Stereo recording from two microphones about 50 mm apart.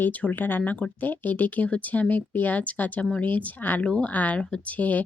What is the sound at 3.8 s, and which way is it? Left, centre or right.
Speech, left.